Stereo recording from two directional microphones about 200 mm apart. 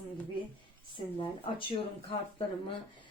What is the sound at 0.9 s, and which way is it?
Speech, 25° left (ahead or behind).